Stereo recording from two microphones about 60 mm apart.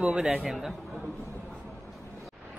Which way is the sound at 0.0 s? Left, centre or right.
Centre.